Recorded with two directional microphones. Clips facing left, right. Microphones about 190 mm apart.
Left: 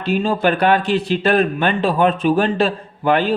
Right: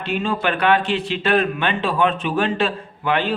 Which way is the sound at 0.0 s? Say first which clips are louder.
Left 5 dB; 35° left (ahead or behind).